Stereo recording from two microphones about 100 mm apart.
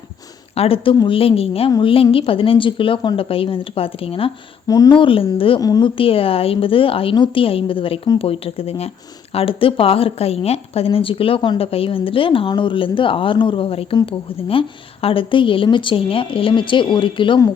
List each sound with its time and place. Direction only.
0.5 s speech: 75° left (ahead or behind)
1.8 s a woman's voice: 60° left (ahead or behind)
4.7 s speech: 40° left (ahead or behind)
4.9 s a woman's voice: 60° left (ahead or behind)
5.5 s speech: 35° left (ahead or behind)
5.8 s a woman's voice: 65° left (ahead or behind); by 8.9 s 80° left
9.3 s a woman's voice: 70° left (ahead or behind)